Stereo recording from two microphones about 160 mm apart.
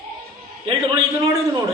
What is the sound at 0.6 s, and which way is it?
Speech, 25° right (ahead or behind).